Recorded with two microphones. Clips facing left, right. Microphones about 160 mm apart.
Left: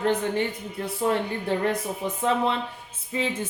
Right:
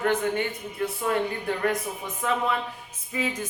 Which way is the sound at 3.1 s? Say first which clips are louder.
Left 2 dB; 25° left (ahead or behind).